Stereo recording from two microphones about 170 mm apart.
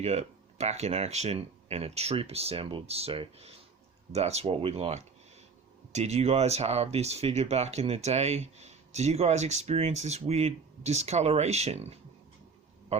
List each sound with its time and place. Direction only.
0.0 s speech: 40° right (ahead or behind)